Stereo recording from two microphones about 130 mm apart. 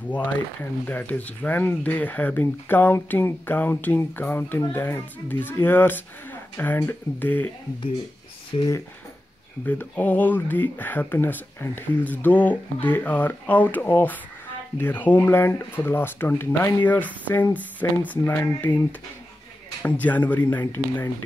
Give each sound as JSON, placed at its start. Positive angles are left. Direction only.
{"t": 0.1, "sound": "speech", "side_deg": 10}
{"t": 8.5, "sound": "speech", "side_deg": 25}
{"t": 9.7, "sound": "speech", "side_deg": 15}